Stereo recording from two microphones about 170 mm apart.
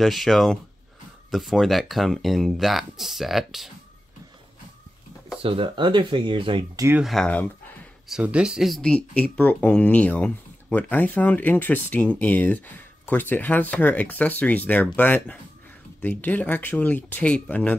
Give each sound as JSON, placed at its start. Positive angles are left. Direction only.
{"t": 0.0, "sound": "speech", "side_deg": 0}
{"t": 5.4, "sound": "speech", "side_deg": -30}
{"t": 7.0, "sound": "speech", "side_deg": 0}
{"t": 8.1, "sound": "speech", "side_deg": -5}